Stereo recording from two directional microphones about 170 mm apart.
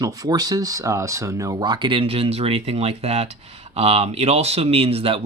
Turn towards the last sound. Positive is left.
turn(degrees=-35)  # may be behind; listen again after turning